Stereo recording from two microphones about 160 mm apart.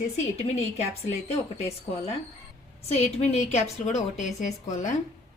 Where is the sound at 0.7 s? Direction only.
40° left (ahead or behind).